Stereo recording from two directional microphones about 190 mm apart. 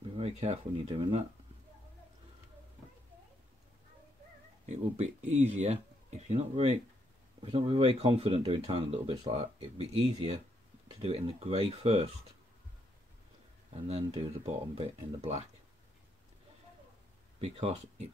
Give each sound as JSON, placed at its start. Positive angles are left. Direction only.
{"t": 0.2, "sound": "speech", "side_deg": -35}
{"t": 4.6, "sound": "speech", "side_deg": -35}
{"t": 14.1, "sound": "speech", "side_deg": -30}
{"t": 17.4, "sound": "speech", "side_deg": -35}